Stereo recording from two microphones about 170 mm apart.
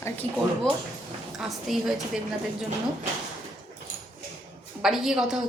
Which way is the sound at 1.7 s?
Centre (ahead or behind).